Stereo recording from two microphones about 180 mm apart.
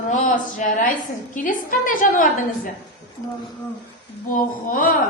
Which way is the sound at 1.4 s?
50° left (ahead or behind).